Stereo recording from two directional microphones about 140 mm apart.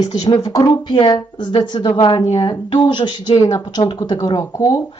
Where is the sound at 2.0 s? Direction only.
40° left (ahead or behind); by 4.8 s 25° left (ahead or behind).